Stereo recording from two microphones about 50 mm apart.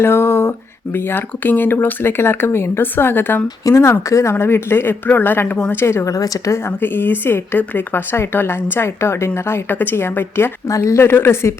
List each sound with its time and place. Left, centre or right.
0.0 s speech: left
4.1 s speech: left
5.8 s speech: left
6.8 s speech: left
7.7 s speech: left
8.7 s speech: left
9.6 s speech: left
10.7 s speech: left